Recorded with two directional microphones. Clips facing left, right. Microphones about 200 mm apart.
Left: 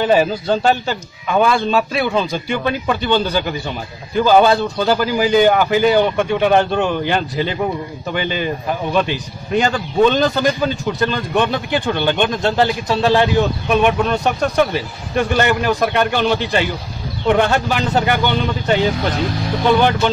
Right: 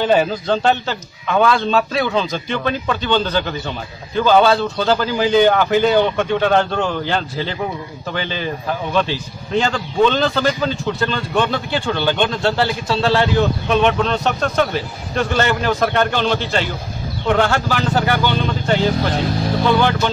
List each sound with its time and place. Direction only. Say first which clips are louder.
0.0 s speech: left 1 dB; 5° left (ahead or behind)